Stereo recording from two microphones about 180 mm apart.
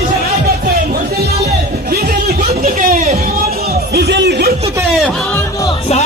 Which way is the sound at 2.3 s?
40° right (ahead or behind).